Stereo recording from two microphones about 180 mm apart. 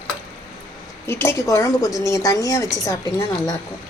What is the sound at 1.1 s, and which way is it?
Speech, 15° left (ahead or behind).